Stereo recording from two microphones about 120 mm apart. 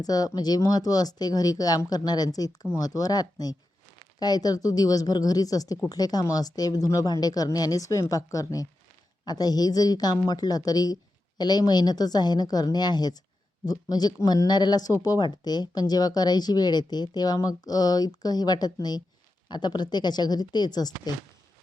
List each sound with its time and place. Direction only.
0.0 s speech: 30° left (ahead or behind)